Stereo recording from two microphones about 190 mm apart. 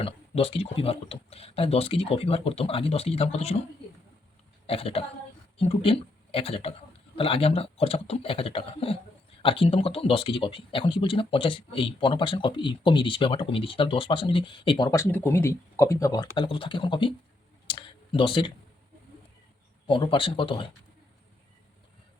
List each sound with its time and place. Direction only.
0.0 s speech: 30° left (ahead or behind)
4.6 s a man's voice: 30° left (ahead or behind)
16.3 s speech: 25° left (ahead or behind)
17.7 s clicking: 25° left (ahead or behind)
19.9 s speech: 25° left (ahead or behind)